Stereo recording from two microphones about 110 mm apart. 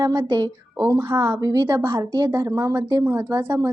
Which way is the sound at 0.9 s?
20° right (ahead or behind).